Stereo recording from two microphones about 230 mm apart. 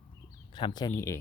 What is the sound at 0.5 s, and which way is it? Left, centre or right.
Speech, centre.